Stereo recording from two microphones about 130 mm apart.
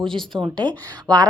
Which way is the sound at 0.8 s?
30° right (ahead or behind).